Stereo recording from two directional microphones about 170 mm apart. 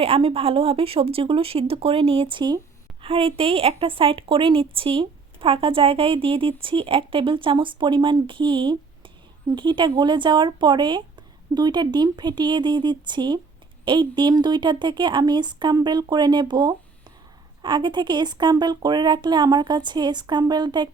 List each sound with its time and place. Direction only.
0.0 s a woman's voice: 35° right (ahead or behind)